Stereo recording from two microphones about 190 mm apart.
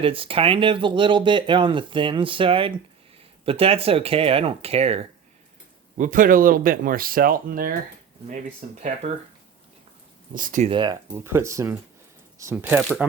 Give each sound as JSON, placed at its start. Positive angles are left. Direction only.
{"t": 0.0, "sound": "speech", "side_deg": -30}
{"t": 6.0, "sound": "speech", "side_deg": -45}
{"t": 10.3, "sound": "speech", "side_deg": -45}
{"t": 10.7, "sound": "speech", "side_deg": -25}
{"t": 11.1, "sound": "speech", "side_deg": -15}